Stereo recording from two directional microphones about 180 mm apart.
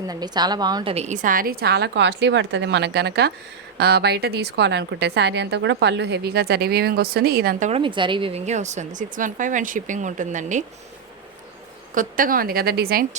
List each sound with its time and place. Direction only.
0.1 s a woman's voice: 20° right (ahead or behind)
0.9 s speech: 40° right (ahead or behind)
7.7 s a woman's voice: 25° right (ahead or behind); by 10.6 s 45° right (ahead or behind)
11.9 s speech: 50° right (ahead or behind)